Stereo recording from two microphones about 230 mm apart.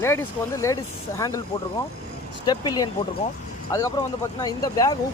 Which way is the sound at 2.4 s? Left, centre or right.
Centre.